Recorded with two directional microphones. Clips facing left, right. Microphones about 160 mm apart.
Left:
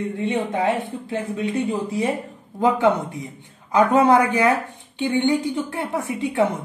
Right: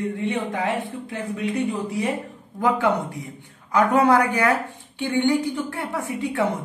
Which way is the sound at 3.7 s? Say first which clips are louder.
Left 2 dB; 25° left (ahead or behind).